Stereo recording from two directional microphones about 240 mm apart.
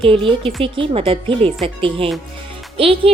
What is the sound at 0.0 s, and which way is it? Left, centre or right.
Speech, right.